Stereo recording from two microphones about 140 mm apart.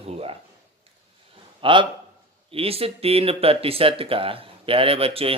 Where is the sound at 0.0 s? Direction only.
45° right (ahead or behind).